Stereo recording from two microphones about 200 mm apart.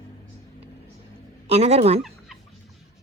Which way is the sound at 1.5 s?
30° right (ahead or behind).